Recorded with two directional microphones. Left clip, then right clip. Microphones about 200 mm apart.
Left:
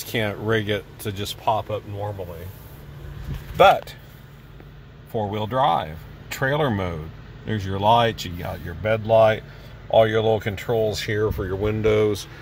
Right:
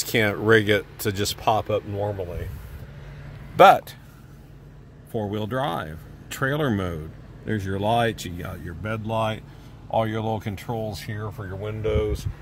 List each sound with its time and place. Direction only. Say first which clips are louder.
0.0 s speech: right 4 dB; 25° right (ahead or behind)
3.5 s speech: right 1 dB; 25° right (ahead or behind)
5.1 s speech: left 4 dB; centre (ahead or behind); by 12.2 s 20° left (ahead or behind)